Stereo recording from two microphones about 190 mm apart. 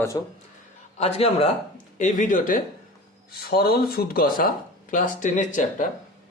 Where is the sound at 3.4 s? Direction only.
55° left (ahead or behind).